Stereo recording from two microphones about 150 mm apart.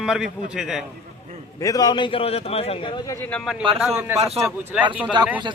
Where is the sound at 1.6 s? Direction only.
25° left (ahead or behind); by 2.7 s 40° left (ahead or behind).